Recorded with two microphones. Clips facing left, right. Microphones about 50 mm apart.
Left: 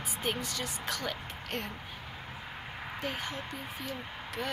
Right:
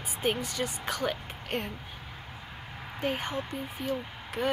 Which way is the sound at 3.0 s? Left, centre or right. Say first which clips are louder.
Right 7 dB; right.